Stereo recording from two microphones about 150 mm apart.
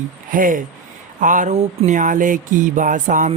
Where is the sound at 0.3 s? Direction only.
65° right (ahead or behind).